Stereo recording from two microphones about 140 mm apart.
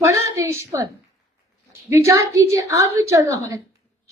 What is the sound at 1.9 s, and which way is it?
Speech, 20° right (ahead or behind).